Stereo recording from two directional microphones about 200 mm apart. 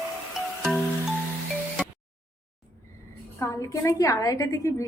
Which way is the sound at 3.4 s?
15° left (ahead or behind).